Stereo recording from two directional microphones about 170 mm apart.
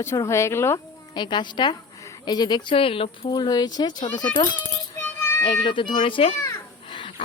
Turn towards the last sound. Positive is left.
turn(degrees=30)  # may be behind; listen again after turning